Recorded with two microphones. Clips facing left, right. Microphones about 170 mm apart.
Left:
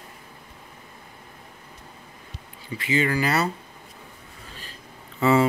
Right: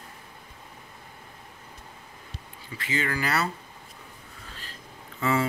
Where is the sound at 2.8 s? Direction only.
15° left (ahead or behind).